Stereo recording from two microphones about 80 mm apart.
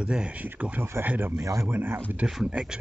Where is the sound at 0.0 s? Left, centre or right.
Centre.